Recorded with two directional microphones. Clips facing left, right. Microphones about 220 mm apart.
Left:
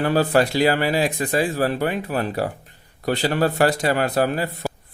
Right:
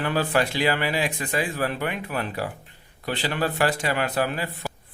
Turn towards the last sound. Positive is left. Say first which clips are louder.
# left 5 dB
turn(degrees=40)  # may be behind; listen again after turning